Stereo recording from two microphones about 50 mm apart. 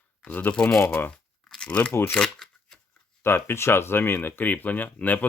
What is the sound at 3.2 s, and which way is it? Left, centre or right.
Speech, left.